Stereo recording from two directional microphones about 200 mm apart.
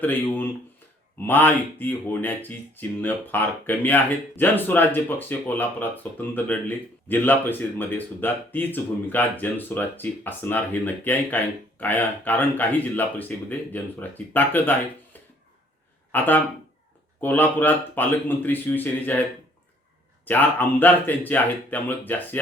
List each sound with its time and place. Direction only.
0.0 s speech: 10° left (ahead or behind)
16.1 s speech: 10° left (ahead or behind)
20.2 s speech: 10° left (ahead or behind)